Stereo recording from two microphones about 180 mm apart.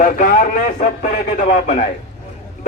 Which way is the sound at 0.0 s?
50° left (ahead or behind).